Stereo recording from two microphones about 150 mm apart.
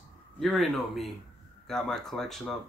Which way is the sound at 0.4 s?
Centre (ahead or behind).